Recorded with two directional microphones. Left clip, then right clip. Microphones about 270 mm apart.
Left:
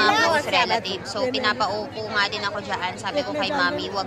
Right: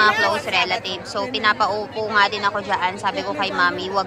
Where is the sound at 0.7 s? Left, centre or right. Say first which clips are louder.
Right 1 dB; centre.